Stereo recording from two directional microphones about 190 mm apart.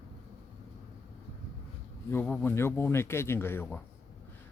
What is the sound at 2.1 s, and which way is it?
A man's voice, 10° left (ahead or behind).